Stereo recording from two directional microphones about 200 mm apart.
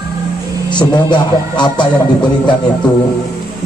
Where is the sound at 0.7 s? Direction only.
20° left (ahead or behind).